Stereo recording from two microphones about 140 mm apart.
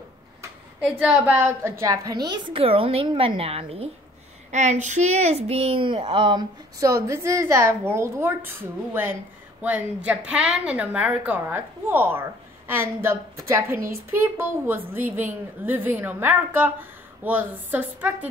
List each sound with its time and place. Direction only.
0.9 s a woman's voice: 10° right (ahead or behind); by 3.9 s 45° right (ahead or behind)
4.5 s speech: 60° right (ahead or behind); by 6.4 s 35° right (ahead or behind)
6.8 s a woman's voice: 20° right (ahead or behind)